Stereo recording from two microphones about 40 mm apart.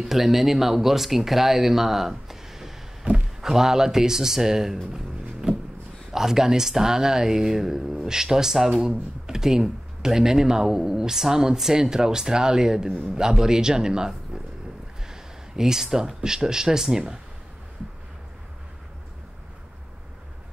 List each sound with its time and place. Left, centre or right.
0.0 s speech: centre
5.4 s a sound: right
6.1 s speech: centre